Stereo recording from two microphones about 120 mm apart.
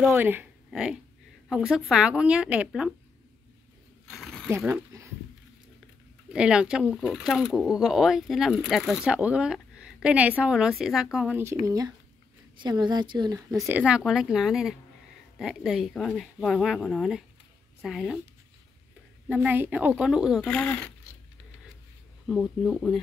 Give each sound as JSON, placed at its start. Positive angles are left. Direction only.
{"t": 0.0, "sound": "a woman's voice", "side_deg": -15}
{"t": 4.1, "sound": "a sound", "side_deg": 0}
{"t": 4.5, "sound": "speech", "side_deg": -20}
{"t": 6.3, "sound": "a woman's voice", "side_deg": -10}
{"t": 11.6, "sound": "a woman's voice", "side_deg": -30}
{"t": 13.7, "sound": "speech", "side_deg": -10}
{"t": 19.2, "sound": "a woman's voice", "side_deg": -15}
{"t": 20.4, "sound": "speech", "side_deg": 10}
{"t": 22.2, "sound": "speech", "side_deg": 0}